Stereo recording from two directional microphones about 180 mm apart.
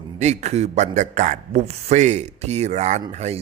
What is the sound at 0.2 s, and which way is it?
Speech, 40° right (ahead or behind).